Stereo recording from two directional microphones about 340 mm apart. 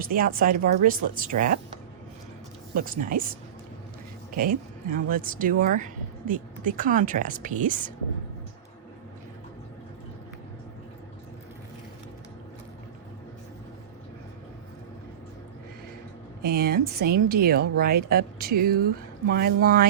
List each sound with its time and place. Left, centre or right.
0.0 s speech: right
16.4 s speech: right